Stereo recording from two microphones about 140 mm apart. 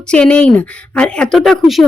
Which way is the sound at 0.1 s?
10° left (ahead or behind).